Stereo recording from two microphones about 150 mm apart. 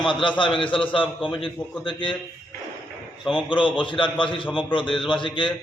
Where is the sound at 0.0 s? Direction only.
30° left (ahead or behind).